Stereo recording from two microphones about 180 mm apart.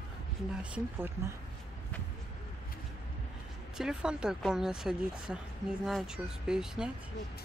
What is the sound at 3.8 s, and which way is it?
Speech, 5° right (ahead or behind).